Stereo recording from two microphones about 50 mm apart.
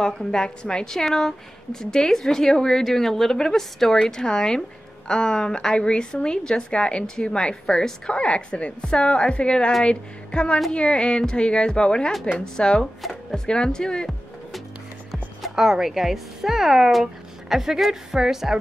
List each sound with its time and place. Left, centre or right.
0.0 s a woman's voice: centre
15.4 s speech: centre